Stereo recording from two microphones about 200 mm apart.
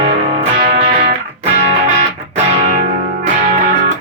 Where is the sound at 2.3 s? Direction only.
40° right (ahead or behind).